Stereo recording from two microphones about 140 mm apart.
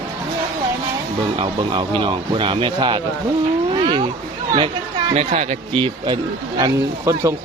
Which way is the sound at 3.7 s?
35° right (ahead or behind).